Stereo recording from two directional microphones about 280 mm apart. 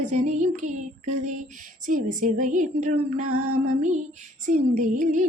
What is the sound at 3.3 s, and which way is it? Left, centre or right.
Music, right.